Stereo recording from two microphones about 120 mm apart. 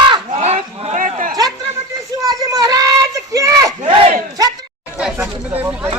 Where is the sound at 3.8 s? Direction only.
55° right (ahead or behind).